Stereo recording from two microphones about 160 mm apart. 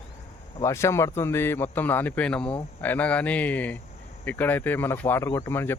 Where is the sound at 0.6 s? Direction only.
15° left (ahead or behind).